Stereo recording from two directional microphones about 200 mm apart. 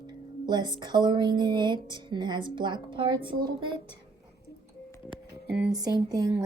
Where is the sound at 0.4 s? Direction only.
20° right (ahead or behind).